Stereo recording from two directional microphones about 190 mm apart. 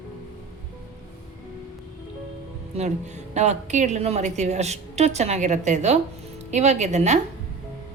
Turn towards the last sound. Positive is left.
turn(degrees=-35)  # may be behind; listen again after turning